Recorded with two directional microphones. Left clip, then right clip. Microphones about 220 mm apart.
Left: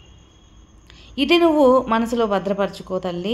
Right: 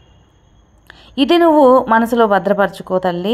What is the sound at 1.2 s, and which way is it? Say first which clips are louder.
A woman's voice: right 5 dB; 20° right (ahead or behind).